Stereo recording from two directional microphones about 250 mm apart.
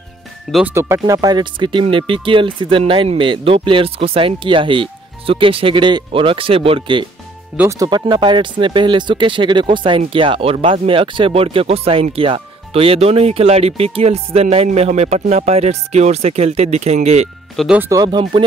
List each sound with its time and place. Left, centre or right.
0.5 s speech: centre; by 17.3 s right
17.6 s speech: centre